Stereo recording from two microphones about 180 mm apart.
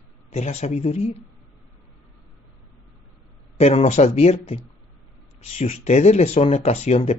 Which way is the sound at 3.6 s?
35° left (ahead or behind).